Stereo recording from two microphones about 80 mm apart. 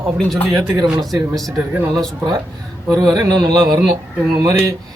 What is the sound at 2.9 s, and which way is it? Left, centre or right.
Speech, right.